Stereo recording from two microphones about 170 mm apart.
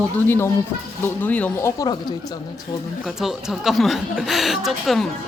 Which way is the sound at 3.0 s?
Centre (ahead or behind).